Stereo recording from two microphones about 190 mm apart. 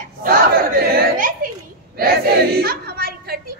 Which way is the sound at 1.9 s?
55° right (ahead or behind).